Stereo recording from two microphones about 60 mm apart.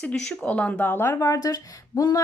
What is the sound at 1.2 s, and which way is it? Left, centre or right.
Speech, left.